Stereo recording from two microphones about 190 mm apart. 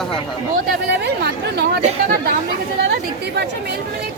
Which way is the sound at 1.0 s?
60° right (ahead or behind).